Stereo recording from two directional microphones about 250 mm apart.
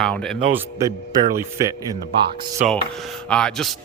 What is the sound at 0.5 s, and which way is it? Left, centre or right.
Speech, centre.